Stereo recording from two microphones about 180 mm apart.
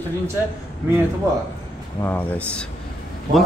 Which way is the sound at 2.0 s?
10° left (ahead or behind).